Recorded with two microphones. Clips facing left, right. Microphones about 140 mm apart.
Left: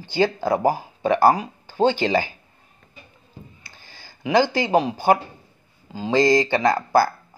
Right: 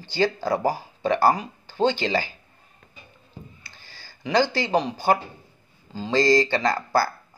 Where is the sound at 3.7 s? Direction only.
15° left (ahead or behind).